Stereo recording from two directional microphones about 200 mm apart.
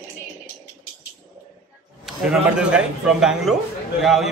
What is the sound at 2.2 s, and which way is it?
A man's voice, 5° right (ahead or behind).